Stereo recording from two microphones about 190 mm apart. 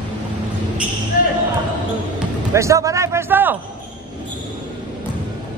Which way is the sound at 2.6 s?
15° right (ahead or behind).